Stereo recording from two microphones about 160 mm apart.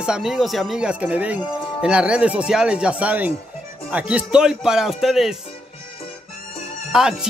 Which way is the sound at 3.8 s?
10° right (ahead or behind).